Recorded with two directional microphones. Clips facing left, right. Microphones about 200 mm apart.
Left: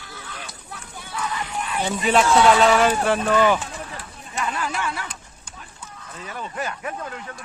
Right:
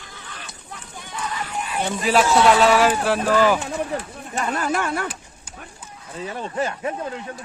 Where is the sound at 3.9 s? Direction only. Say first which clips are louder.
Right 7 dB; 55° right (ahead or behind).